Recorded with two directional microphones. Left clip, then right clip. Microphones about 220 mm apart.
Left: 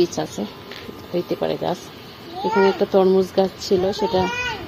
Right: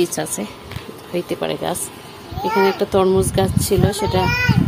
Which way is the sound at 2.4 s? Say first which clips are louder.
Right 1 dB; 25° right (ahead or behind).